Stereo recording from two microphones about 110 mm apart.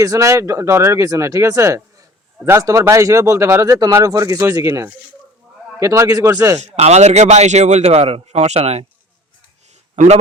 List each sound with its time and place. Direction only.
0.0 s speech: 30° right (ahead or behind)
6.6 s speech: 80° right